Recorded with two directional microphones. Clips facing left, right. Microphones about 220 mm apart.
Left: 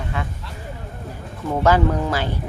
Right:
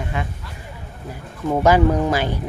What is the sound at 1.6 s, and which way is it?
Speech, 15° right (ahead or behind).